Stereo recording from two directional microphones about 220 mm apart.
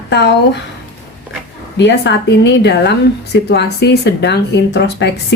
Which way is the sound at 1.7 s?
50° left (ahead or behind).